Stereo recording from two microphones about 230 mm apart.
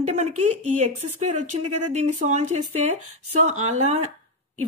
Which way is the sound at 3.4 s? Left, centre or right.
Right.